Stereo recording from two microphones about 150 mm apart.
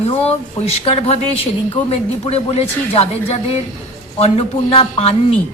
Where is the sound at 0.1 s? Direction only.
45° left (ahead or behind).